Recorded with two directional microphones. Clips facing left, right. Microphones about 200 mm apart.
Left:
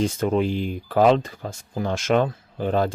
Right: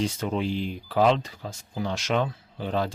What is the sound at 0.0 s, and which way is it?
Speech, 50° left (ahead or behind).